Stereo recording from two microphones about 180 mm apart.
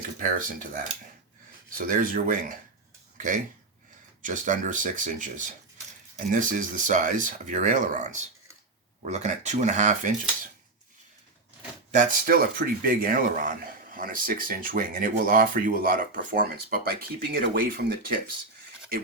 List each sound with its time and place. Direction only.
0.3 s speech: 50° right (ahead or behind)
11.9 s speech: 50° right (ahead or behind)